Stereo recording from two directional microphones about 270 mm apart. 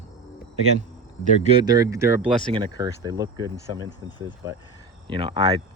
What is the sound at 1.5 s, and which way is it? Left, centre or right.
Speech, centre.